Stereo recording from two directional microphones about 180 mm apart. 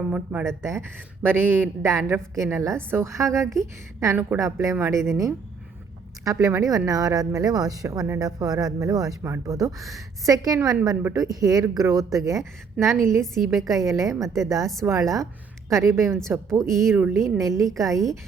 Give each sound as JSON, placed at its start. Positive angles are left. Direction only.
{"t": 0.1, "sound": "speech", "side_deg": -10}
{"t": 6.2, "sound": "speech", "side_deg": -15}
{"t": 13.2, "sound": "a woman's voice", "side_deg": 0}
{"t": 13.8, "sound": "speech", "side_deg": -20}
{"t": 14.2, "sound": "a woman's voice", "side_deg": 0}
{"t": 14.8, "sound": "speech", "side_deg": -15}